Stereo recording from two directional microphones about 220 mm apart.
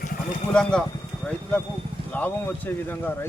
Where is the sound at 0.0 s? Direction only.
40° left (ahead or behind).